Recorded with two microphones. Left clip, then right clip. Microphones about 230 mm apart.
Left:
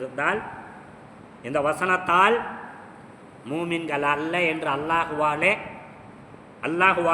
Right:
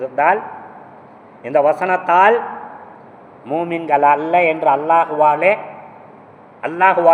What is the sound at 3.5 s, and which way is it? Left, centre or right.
A man's voice, centre.